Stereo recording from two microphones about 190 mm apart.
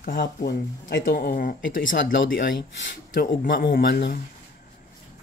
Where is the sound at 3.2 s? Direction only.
50° left (ahead or behind).